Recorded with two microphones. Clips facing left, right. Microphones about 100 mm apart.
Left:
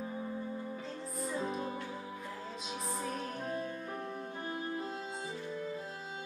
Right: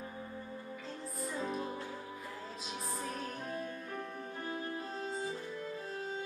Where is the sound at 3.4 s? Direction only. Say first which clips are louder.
Left 3 dB; 30° left (ahead or behind).